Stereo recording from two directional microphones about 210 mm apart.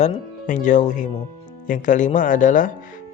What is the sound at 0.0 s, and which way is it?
Speech, 35° left (ahead or behind).